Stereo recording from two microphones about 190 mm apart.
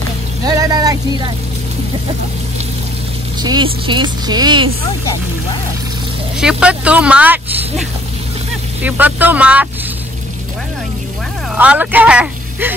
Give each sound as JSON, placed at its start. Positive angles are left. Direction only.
{"t": 0.5, "sound": "vehicle", "side_deg": -20}
{"t": 3.4, "sound": "speech", "side_deg": -25}
{"t": 6.4, "sound": "speech", "side_deg": -5}
{"t": 8.8, "sound": "speech", "side_deg": -10}
{"t": 11.5, "sound": "speech", "side_deg": -10}